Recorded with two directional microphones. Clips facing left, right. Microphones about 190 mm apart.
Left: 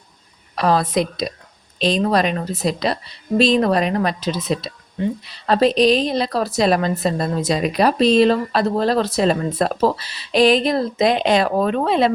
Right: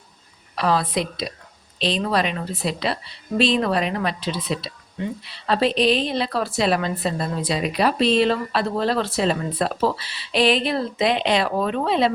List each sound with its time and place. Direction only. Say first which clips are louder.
0.5 s a woman's voice: left 4 dB; 45° left (ahead or behind)